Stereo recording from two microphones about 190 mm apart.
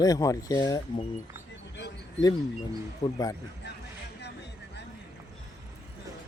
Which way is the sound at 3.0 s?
25° left (ahead or behind).